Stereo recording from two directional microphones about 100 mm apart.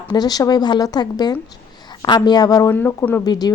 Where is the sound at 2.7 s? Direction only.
20° left (ahead or behind).